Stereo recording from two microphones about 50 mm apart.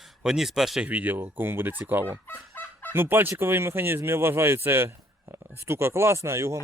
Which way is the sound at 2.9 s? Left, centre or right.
Right.